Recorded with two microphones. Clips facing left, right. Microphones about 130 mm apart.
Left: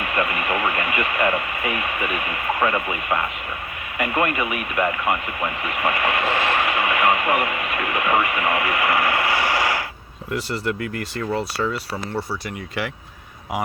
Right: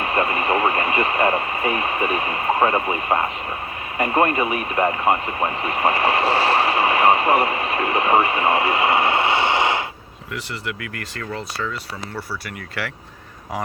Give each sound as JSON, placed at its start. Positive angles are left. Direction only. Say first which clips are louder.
{"t": 0.0, "sound": "speech", "louder": "right 3 dB", "side_deg": -30}
{"t": 10.3, "sound": "speech", "louder": "left 5 dB", "side_deg": 35}